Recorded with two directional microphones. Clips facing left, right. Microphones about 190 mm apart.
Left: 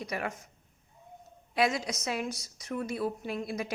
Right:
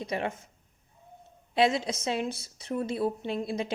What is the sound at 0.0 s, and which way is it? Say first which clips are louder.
Speech: right 3 dB; 25° right (ahead or behind).